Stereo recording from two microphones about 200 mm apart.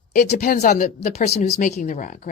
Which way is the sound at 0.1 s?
40° left (ahead or behind).